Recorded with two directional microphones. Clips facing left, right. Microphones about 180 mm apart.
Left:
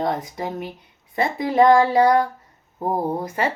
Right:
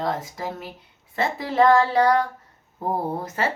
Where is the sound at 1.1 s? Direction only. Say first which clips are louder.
Left 3 dB; 15° left (ahead or behind).